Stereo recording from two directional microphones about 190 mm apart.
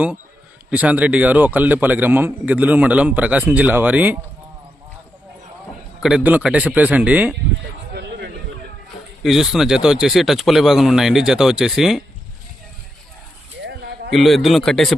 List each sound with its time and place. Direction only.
0.7 s a man's voice: 5° right (ahead or behind)
6.0 s a man's voice: 5° right (ahead or behind)
9.2 s speech: centre (ahead or behind)
13.7 s a sound: 60° right (ahead or behind)
14.1 s speech: centre (ahead or behind)